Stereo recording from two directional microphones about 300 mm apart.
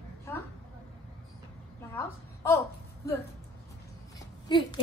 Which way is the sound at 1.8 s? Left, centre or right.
Centre.